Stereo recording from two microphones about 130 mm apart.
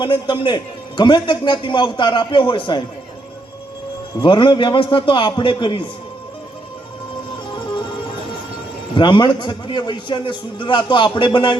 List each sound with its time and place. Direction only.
0.0 s a man's voice: 40° left (ahead or behind)
4.2 s a man's voice: 40° left (ahead or behind)
9.0 s a man's voice: 35° left (ahead or behind)